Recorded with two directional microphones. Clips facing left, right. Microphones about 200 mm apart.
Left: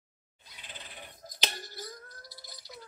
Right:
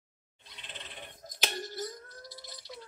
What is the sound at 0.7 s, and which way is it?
Owl, 25° right (ahead or behind).